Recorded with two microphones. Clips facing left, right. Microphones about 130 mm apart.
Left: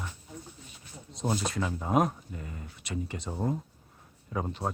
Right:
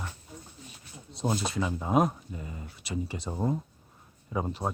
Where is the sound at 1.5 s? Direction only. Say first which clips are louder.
Right 1 dB; 10° right (ahead or behind).